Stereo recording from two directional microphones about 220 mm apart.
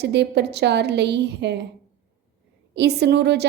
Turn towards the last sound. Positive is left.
turn(degrees=-50)  # may be behind; listen again after turning